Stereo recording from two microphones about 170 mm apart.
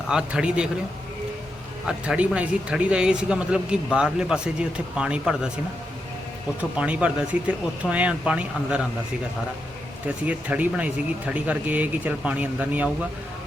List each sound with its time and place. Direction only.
0.1 s speech: 5° right (ahead or behind)
1.9 s speech: 5° right (ahead or behind)
6.6 s speech: 5° right (ahead or behind)
10.2 s speech: 10° right (ahead or behind)